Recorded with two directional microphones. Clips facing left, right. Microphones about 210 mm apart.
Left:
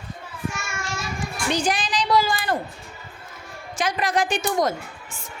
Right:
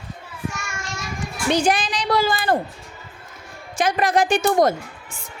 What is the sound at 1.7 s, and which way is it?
Speech, 55° right (ahead or behind).